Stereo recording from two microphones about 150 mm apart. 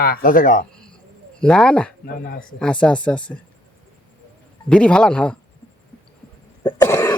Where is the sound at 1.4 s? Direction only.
5° left (ahead or behind).